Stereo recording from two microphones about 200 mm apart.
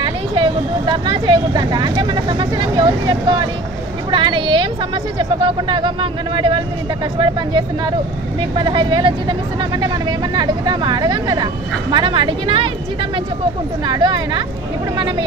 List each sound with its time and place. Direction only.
0.0 s speech: 25° right (ahead or behind)
13.8 s speech: 20° right (ahead or behind)